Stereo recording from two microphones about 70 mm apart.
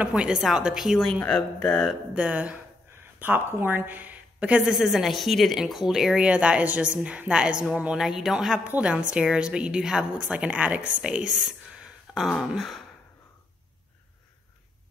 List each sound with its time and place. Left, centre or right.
0.0 s a woman's voice: centre
1.6 s speech: centre
2.1 s a woman's voice: centre
4.7 s speech: centre
6.2 s a woman's voice: centre
8.6 s speech: right
8.9 s a woman's voice: centre